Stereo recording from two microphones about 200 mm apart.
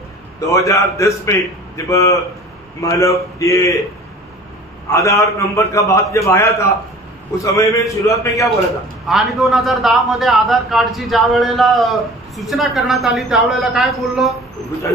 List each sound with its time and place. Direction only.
0.5 s a man's voice: 15° left (ahead or behind)
4.9 s a man's voice: 15° left (ahead or behind)
9.0 s a man's voice: centre (ahead or behind)